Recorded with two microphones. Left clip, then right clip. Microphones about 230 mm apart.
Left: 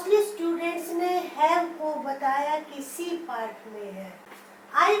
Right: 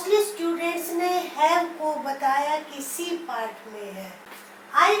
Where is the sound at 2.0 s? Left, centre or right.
Centre.